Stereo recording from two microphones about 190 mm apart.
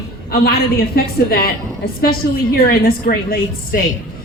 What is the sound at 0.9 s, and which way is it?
A woman's voice, 55° left (ahead or behind).